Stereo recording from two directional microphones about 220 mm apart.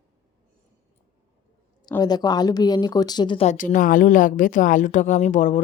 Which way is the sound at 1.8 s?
20° left (ahead or behind).